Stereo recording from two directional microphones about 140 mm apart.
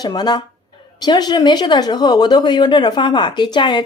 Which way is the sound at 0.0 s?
30° left (ahead or behind).